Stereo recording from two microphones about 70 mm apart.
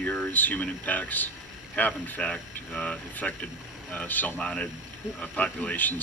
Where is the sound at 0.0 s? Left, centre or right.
Left.